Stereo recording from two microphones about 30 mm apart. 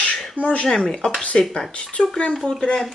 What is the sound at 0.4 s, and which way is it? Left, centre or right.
Speech, left.